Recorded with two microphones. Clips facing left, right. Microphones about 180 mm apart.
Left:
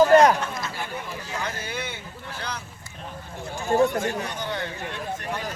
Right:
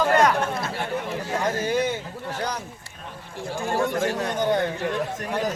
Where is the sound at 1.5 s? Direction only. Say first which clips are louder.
Right 9 dB; 40° right (ahead or behind).